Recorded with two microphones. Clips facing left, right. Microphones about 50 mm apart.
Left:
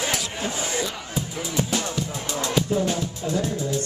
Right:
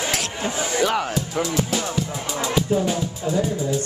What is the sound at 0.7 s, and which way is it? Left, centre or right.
Speech, right.